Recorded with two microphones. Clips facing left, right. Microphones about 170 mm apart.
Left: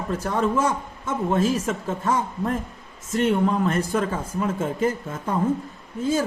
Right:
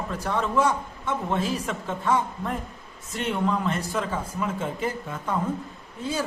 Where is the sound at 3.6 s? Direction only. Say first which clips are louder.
Left 5 dB; 50° left (ahead or behind).